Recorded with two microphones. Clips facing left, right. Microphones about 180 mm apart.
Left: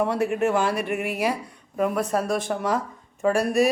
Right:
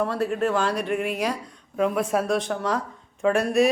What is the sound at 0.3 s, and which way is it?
Speech, 10° left (ahead or behind).